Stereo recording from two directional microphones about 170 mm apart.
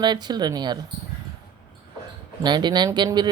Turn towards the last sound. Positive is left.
turn(degrees=-25)  # may be behind; listen again after turning